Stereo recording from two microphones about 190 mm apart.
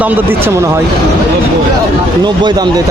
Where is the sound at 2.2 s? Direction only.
20° right (ahead or behind).